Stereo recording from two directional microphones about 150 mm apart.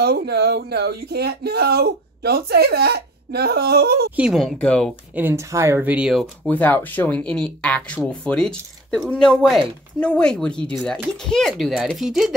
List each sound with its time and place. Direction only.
0.0 s speech: 90° right
4.2 s speech: centre (ahead or behind)
5.1 s speech: 15° right (ahead or behind)
6.4 s speech: 10° left (ahead or behind)